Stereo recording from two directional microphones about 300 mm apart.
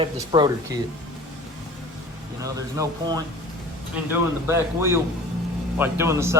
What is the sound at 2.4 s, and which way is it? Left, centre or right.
Speech, centre.